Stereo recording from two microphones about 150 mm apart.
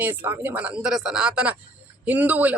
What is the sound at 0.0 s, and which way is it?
A man's voice, 15° right (ahead or behind).